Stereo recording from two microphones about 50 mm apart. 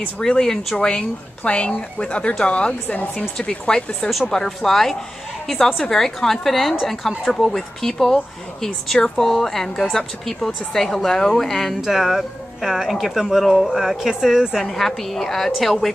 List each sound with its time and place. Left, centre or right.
0.2 s a woman's voice: centre
4.5 s a woman's voice: centre
14.7 s a woman's voice: centre